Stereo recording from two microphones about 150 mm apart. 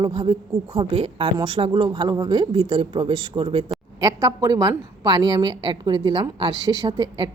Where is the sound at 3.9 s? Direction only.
25° right (ahead or behind).